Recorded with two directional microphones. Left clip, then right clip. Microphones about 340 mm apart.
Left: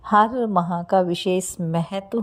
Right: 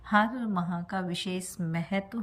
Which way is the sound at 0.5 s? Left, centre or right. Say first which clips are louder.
Left 12 dB; left.